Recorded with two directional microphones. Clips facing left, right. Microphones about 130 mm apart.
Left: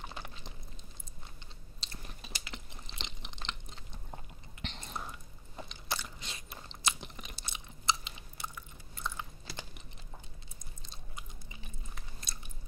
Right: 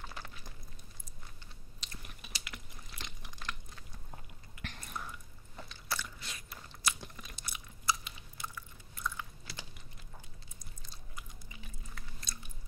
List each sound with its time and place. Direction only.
0.0 s a sound: 20° left (ahead or behind)
1.8 s chewing: 30° left (ahead or behind)
2.4 s biting: 25° left (ahead or behind)
7.3 s chewing: 25° left (ahead or behind)
11.9 s chewing: 20° left (ahead or behind)